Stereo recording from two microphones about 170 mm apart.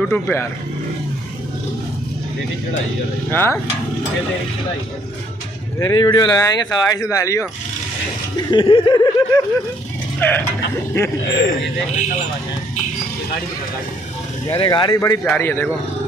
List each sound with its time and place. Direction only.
0.0 s speech: 10° left (ahead or behind)
3.3 s speech: 15° left (ahead or behind)
5.8 s speech: 25° left (ahead or behind)
8.5 s speech: 30° left (ahead or behind)
10.2 s speech: 10° left (ahead or behind)
11.2 s speech: 90° left
14.6 s speech: 25° left (ahead or behind)